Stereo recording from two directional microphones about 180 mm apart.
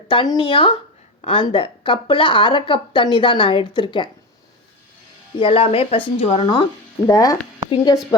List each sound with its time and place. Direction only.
0.1 s a woman's voice: 25° left (ahead or behind)
5.4 s a woman's voice: 30° left (ahead or behind)
7.1 s speech: 20° left (ahead or behind)